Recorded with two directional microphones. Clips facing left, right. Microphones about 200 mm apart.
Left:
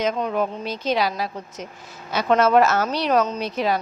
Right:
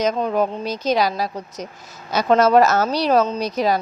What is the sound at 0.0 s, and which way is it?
A woman's voice, 40° right (ahead or behind).